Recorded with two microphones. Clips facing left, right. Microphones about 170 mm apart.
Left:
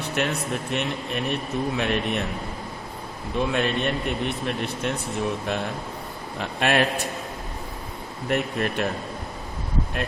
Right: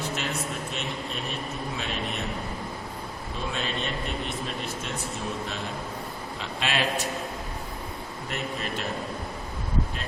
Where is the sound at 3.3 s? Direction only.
60° left (ahead or behind).